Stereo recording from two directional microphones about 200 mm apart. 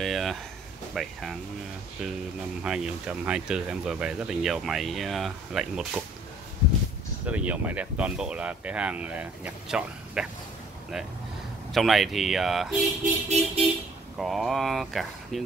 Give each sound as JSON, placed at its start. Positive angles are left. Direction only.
{"t": 0.0, "sound": "a sound", "side_deg": 0}
{"t": 1.0, "sound": "speech", "side_deg": 0}
{"t": 2.6, "sound": "speech", "side_deg": -5}
{"t": 7.2, "sound": "speech", "side_deg": -5}
{"t": 11.7, "sound": "speech", "side_deg": 0}
{"t": 13.0, "sound": "vehicle", "side_deg": -35}
{"t": 14.1, "sound": "speech", "side_deg": 0}